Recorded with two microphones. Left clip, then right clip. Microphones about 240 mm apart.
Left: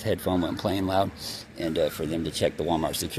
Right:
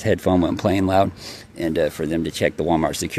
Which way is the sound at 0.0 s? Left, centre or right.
Right.